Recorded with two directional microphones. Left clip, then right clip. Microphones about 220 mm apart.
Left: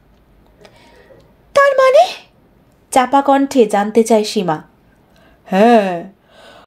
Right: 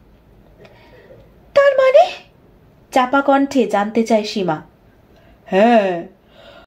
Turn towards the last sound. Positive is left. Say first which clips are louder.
# left 1 dB
turn(degrees=40)  # may be behind; listen again after turning